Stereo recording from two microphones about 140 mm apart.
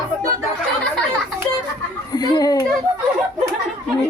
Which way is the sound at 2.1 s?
30° left (ahead or behind).